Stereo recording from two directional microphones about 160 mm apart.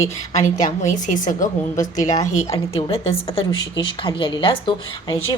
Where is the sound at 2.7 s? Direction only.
35° left (ahead or behind).